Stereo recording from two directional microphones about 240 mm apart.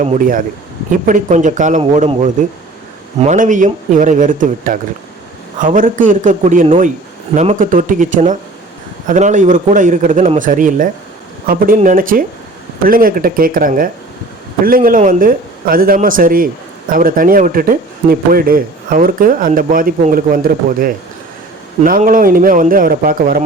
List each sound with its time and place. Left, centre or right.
0.0 s speech: right